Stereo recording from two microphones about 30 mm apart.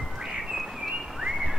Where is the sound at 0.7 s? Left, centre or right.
Centre.